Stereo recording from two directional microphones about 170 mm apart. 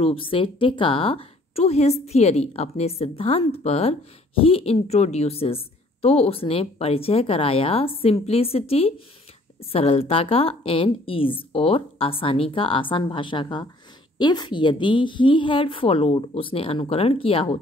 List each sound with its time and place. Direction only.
0.0 s a woman's voice: 30° left (ahead or behind)